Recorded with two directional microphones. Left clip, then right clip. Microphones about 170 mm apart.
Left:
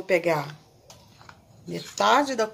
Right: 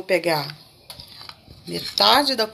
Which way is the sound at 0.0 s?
5° right (ahead or behind).